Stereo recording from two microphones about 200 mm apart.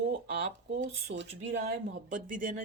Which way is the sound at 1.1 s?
65° right (ahead or behind).